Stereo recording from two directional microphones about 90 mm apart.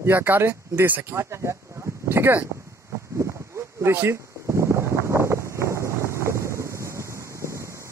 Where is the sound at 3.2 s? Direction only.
30° right (ahead or behind).